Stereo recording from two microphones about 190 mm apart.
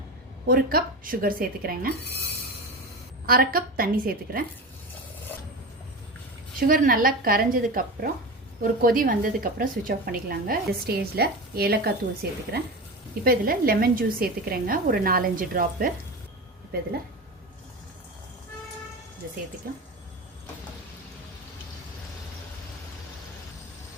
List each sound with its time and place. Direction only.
0.4 s a woman's voice: 50° right (ahead or behind)
3.2 s a woman's voice: 50° right (ahead or behind)
6.6 s a woman's voice: 45° right (ahead or behind)
19.2 s a woman's voice: 55° right (ahead or behind)